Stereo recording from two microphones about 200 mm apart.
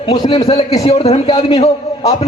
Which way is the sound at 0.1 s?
25° left (ahead or behind).